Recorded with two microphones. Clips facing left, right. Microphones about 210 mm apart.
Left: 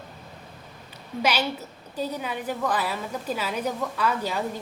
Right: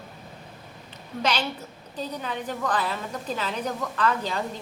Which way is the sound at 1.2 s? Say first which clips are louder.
Left 2 dB; 10° left (ahead or behind).